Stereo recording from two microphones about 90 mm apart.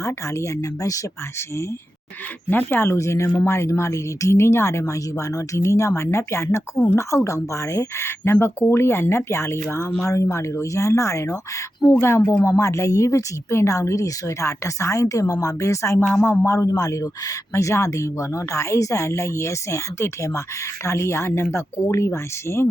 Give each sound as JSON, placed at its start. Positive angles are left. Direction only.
{"t": 0.0, "sound": "speech", "side_deg": 35}
{"t": 2.5, "sound": "speech", "side_deg": 25}
{"t": 16.0, "sound": "speech", "side_deg": 20}
{"t": 16.5, "sound": "speech", "side_deg": 35}